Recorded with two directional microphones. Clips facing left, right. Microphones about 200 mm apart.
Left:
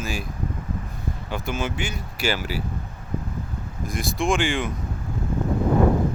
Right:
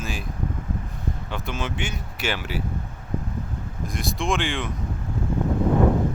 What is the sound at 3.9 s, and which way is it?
Speech, centre (ahead or behind).